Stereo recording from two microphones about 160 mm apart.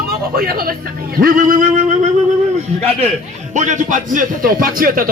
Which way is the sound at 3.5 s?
50° right (ahead or behind).